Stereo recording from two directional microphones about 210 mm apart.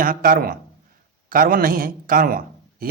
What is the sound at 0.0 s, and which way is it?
A man's voice, 40° right (ahead or behind).